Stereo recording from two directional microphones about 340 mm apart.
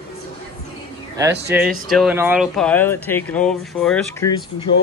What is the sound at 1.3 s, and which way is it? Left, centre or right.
Speech, right.